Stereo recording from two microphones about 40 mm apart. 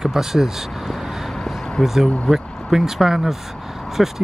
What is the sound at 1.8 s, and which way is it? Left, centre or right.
Speech, centre.